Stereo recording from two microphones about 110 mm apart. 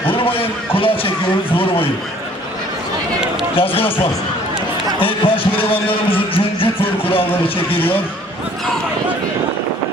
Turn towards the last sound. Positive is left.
turn(degrees=20)  # may be behind; listen again after turning